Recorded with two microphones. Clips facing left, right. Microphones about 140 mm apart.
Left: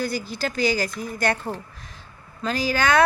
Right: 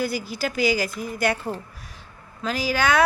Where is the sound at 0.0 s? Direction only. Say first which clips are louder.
Right 1 dB; 10° right (ahead or behind).